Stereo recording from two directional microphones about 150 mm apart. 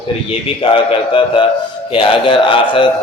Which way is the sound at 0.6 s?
35° left (ahead or behind).